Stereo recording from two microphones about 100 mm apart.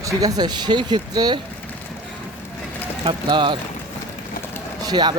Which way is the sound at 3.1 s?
50° right (ahead or behind).